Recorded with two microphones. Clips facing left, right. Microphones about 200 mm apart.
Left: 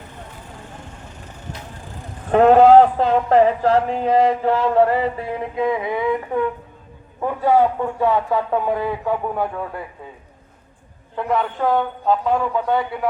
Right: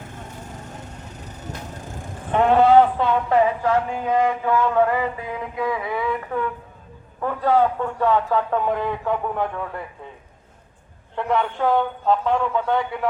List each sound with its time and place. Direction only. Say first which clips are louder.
1.7 s vehicle: right 2 dB; 45° right (ahead or behind)
2.3 s a man's voice: left 4 dB; 45° left (ahead or behind); by 9.8 s 5° left (ahead or behind)
11.1 s a man's voice: left 1 dB; 5° left (ahead or behind)